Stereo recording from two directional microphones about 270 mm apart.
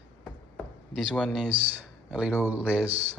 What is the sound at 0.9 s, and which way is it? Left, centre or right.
Speech, centre.